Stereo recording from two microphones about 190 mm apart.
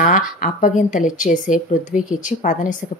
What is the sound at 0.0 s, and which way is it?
A woman's voice, 45° left (ahead or behind).